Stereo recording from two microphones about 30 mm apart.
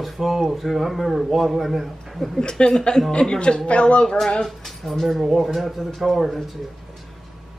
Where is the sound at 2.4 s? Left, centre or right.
Left.